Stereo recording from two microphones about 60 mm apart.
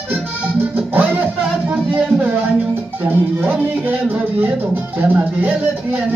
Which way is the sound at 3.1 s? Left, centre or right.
Right.